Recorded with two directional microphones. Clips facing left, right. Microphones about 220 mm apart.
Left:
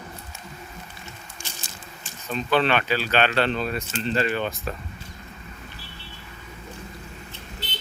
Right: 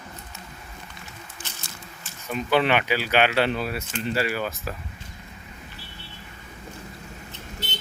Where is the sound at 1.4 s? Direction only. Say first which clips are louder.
Left 2 dB; 15° left (ahead or behind).